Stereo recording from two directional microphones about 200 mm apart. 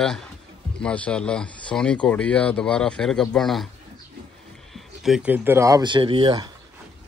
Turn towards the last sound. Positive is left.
turn(degrees=-25)  # may be behind; listen again after turning